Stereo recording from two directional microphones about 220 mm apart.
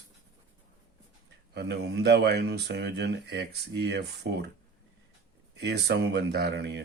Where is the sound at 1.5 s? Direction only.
50° right (ahead or behind).